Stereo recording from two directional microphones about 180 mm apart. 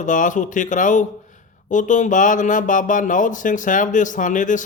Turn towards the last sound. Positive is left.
turn(degrees=45)  # may be behind; listen again after turning